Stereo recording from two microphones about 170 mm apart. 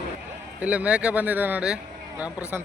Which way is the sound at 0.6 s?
10° right (ahead or behind).